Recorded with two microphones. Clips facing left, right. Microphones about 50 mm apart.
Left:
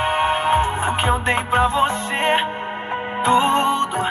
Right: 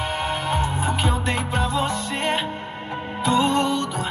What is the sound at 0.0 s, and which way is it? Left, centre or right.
Music, left.